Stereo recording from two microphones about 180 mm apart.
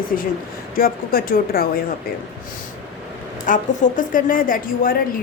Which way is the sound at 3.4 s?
45° left (ahead or behind).